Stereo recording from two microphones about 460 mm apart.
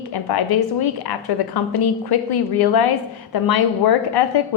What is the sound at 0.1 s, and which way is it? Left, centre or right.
A woman's voice, left.